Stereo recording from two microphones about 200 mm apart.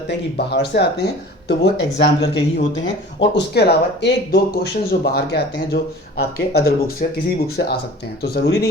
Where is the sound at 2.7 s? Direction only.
60° left (ahead or behind).